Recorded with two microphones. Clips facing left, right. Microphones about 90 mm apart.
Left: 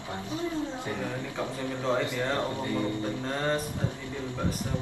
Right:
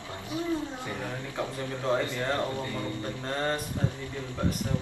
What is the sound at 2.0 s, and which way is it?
Speech, 20° left (ahead or behind).